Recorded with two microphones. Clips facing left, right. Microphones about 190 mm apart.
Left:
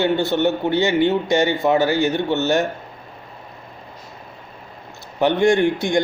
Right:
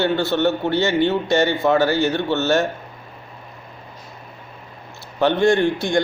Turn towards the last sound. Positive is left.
turn(degrees=15)  # may be behind; listen again after turning